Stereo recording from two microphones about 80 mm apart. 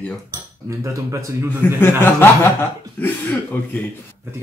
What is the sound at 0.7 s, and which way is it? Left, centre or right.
Speech, right.